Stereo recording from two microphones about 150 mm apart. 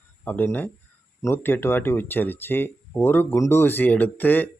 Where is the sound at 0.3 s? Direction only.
10° left (ahead or behind).